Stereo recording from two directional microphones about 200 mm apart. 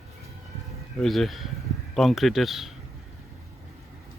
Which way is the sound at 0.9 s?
Centre (ahead or behind).